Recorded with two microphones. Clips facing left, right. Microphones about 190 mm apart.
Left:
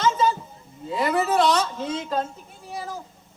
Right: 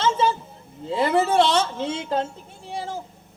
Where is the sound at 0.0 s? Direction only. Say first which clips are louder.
Even; 25° right (ahead or behind).